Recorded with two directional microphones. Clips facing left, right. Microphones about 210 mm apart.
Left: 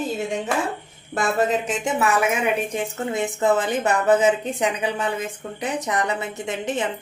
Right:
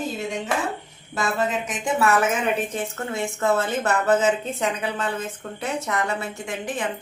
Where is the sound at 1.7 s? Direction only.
20° left (ahead or behind).